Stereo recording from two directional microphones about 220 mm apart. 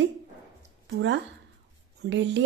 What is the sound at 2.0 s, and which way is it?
Speech, 50° right (ahead or behind).